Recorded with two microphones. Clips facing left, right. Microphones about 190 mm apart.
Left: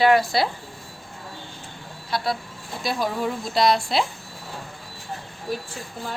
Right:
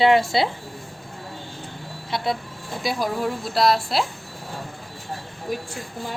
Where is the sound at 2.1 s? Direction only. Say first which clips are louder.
Right 1 dB; 20° right (ahead or behind).